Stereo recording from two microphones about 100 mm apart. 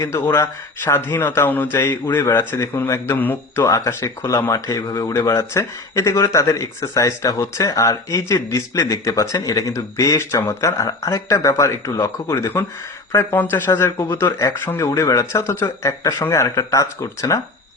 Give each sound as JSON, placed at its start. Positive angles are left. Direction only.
{"t": 0.0, "sound": "speech", "side_deg": 25}